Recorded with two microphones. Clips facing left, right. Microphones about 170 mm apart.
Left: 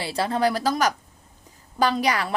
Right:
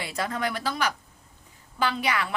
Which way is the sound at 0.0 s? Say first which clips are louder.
Left 6 dB; 30° left (ahead or behind).